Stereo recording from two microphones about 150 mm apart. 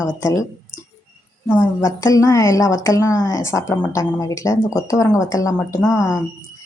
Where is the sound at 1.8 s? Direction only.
20° left (ahead or behind).